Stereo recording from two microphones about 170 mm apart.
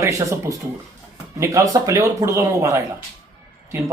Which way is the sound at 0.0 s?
15° right (ahead or behind).